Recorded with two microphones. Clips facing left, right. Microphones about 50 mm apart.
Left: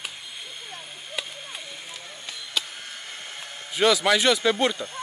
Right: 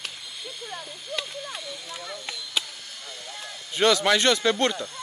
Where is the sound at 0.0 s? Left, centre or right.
Left.